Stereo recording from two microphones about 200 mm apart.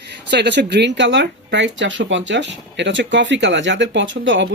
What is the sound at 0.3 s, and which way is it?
Speech, 60° right (ahead or behind).